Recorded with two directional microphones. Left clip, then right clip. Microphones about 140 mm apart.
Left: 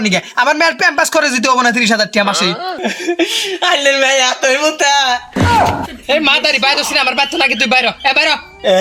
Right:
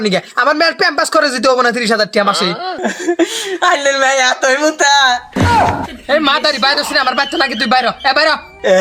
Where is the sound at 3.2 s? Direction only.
15° right (ahead or behind).